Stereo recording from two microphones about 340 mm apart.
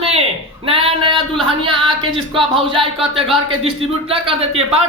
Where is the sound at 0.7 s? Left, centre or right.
Centre.